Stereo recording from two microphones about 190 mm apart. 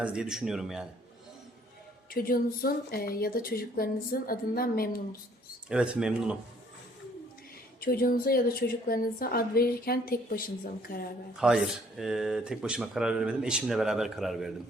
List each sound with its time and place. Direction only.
0.0 s speech: 5° right (ahead or behind)
2.0 s a woman's voice: 50° left (ahead or behind)
5.6 s speech: 5° right (ahead or behind)
7.8 s a woman's voice: 50° left (ahead or behind)
11.3 s speech: 5° right (ahead or behind)